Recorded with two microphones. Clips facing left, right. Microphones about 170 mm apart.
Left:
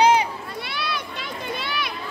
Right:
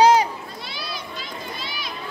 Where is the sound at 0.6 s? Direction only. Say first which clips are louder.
Left 4 dB; 65° left (ahead or behind).